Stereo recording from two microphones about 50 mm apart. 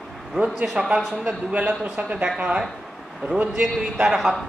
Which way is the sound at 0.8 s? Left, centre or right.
Centre.